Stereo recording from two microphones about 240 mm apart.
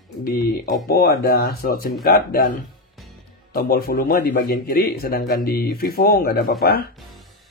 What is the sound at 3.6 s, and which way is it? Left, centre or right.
A man's voice, left.